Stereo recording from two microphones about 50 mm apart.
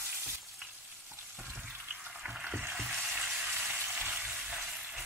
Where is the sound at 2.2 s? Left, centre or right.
Centre.